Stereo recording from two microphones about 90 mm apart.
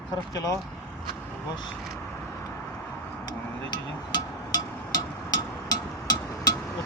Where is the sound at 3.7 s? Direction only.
50° left (ahead or behind).